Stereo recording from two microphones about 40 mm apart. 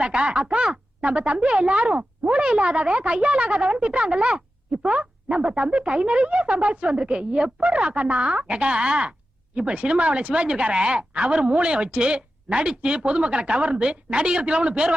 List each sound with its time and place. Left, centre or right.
0.0 s speech: right